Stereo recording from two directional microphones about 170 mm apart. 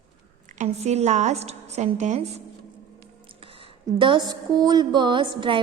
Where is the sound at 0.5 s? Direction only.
40° right (ahead or behind).